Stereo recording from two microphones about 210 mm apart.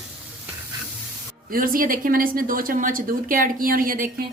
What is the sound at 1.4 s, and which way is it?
Speech, 40° right (ahead or behind).